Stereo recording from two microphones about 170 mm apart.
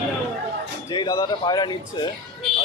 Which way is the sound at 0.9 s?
20° left (ahead or behind).